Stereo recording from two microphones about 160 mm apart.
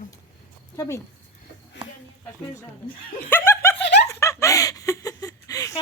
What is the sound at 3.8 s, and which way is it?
Snicker, 90° left.